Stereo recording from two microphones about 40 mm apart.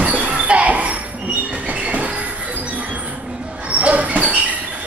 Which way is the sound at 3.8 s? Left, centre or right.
Right.